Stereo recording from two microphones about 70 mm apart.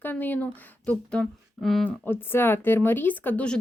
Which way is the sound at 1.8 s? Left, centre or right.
Left.